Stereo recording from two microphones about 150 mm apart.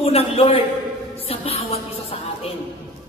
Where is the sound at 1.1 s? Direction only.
40° left (ahead or behind).